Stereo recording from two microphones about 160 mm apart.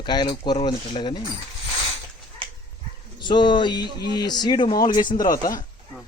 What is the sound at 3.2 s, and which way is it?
Speech, 30° left (ahead or behind).